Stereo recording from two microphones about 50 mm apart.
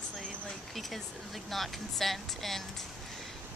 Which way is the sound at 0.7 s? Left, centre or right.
Centre.